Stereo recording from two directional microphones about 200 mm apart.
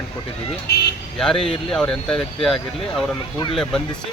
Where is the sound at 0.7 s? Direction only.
55° left (ahead or behind).